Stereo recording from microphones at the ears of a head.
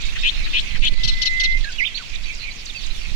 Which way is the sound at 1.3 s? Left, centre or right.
Right.